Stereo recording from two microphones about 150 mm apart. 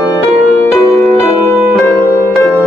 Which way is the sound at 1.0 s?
Centre (ahead or behind).